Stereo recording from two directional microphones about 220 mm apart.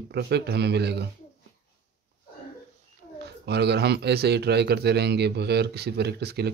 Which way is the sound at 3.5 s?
50° right (ahead or behind).